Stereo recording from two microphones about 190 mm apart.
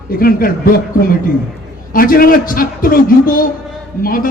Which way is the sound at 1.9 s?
50° left (ahead or behind).